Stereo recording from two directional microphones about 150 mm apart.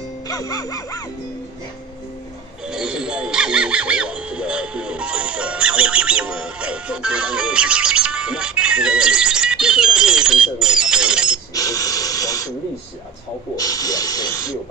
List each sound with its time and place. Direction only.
0.3 s speech: 25° left (ahead or behind)
2.7 s speech: 5° right (ahead or behind)
11.5 s a sound: 25° left (ahead or behind)
13.6 s speech: 25° left (ahead or behind)